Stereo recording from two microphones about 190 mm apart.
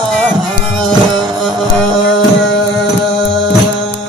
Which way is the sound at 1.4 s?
Centre (ahead or behind).